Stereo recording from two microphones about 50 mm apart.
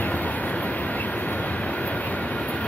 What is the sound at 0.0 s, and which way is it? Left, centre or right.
Vehicle, left.